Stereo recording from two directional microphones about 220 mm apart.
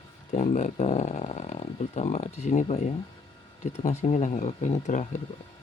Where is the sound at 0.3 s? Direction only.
30° left (ahead or behind).